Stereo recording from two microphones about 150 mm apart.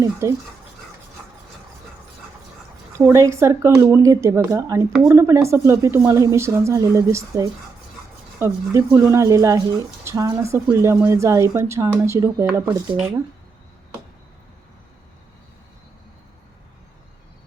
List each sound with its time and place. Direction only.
0.0 s speech: 20° right (ahead or behind)
3.0 s a woman's voice: 20° right (ahead or behind)